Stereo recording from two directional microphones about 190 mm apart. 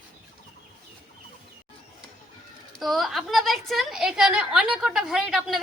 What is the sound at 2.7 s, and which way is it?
A woman's voice, centre (ahead or behind).